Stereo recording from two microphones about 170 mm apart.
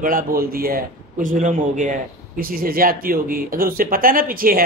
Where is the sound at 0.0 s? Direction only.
55° right (ahead or behind).